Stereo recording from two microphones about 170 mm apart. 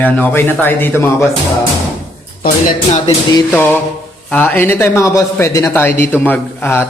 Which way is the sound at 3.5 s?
10° left (ahead or behind).